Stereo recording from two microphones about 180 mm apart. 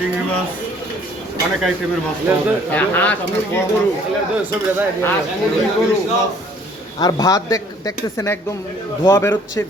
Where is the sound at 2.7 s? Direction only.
10° left (ahead or behind).